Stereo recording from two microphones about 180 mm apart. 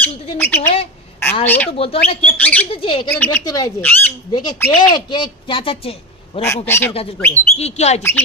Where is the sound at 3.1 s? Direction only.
10° left (ahead or behind).